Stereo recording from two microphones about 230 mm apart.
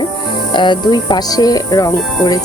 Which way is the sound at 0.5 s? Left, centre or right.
Centre.